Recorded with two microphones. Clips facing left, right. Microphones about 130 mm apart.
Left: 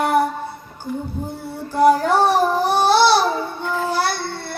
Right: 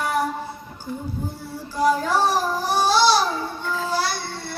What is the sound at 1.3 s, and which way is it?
Baby cry, 60° left (ahead or behind).